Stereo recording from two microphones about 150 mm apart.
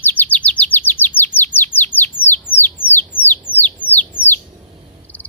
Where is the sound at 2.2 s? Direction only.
15° left (ahead or behind).